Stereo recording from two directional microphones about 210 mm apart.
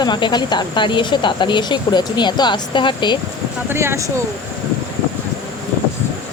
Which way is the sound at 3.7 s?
10° right (ahead or behind).